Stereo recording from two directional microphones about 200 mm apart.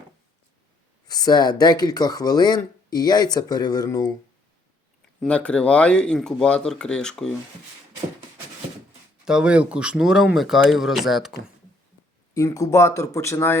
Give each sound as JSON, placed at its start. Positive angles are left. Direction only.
{"t": 1.0, "sound": "speech", "side_deg": 20}
{"t": 5.2, "sound": "speech", "side_deg": 5}
{"t": 9.2, "sound": "speech", "side_deg": -5}
{"t": 12.3, "sound": "speech", "side_deg": 15}